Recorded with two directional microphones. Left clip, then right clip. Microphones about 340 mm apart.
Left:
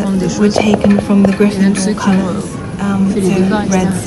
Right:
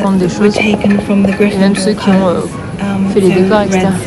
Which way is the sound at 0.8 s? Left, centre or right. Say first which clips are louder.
Even; centre.